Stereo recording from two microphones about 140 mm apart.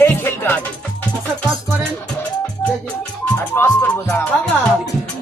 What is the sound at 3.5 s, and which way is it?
Speech, 15° left (ahead or behind).